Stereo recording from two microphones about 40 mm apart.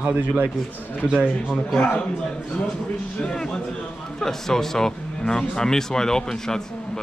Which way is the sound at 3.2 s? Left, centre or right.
Centre.